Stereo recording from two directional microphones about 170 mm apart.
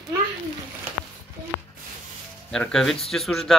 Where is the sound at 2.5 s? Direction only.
5° left (ahead or behind).